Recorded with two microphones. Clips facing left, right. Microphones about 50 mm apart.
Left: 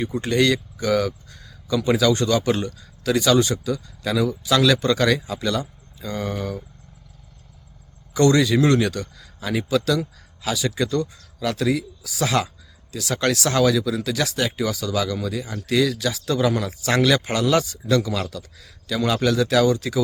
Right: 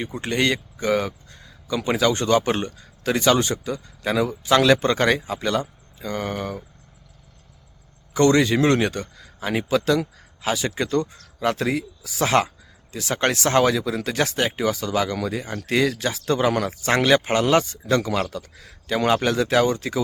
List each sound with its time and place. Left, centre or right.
0.0 s speech: right
8.1 s speech: right